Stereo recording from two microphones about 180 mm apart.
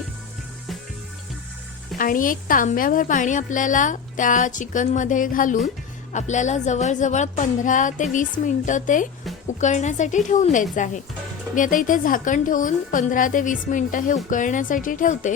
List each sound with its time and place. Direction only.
2.0 s a woman's voice: 50° left (ahead or behind)